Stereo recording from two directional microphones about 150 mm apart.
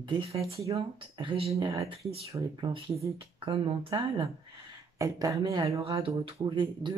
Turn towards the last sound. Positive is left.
turn(degrees=-30)  # may be behind; listen again after turning